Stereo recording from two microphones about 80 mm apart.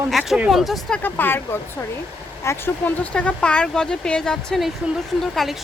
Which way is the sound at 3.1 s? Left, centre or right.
Centre.